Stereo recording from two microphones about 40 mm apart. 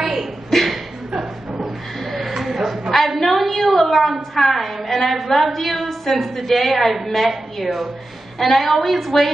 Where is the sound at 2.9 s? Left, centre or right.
Centre.